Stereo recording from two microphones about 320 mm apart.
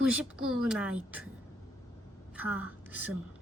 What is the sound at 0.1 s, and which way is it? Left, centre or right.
Speech, centre.